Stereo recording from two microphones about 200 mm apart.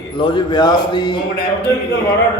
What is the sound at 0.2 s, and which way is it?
Speech, 25° left (ahead or behind).